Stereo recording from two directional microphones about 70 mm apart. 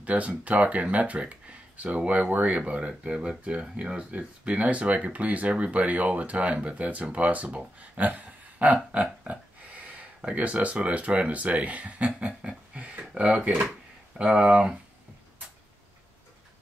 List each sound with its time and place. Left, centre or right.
0.0 s speech: centre
12.2 s a sound: centre
13.2 s speech: centre